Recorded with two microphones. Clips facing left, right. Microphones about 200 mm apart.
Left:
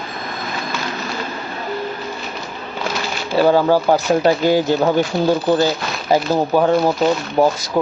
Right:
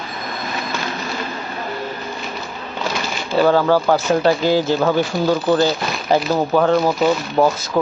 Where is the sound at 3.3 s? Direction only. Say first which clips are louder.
Left 1 dB; 10° left (ahead or behind).